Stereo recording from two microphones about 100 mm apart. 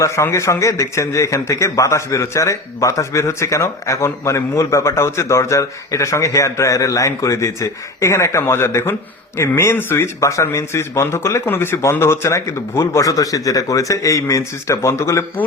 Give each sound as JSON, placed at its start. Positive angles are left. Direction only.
{"t": 0.0, "sound": "a man's voice", "side_deg": 30}